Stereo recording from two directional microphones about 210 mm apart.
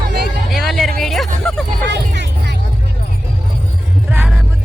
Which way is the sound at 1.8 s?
55° right (ahead or behind).